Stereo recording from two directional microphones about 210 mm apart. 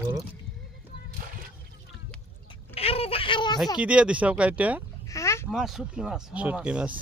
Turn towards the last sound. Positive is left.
turn(degrees=-5)  # may be behind; listen again after turning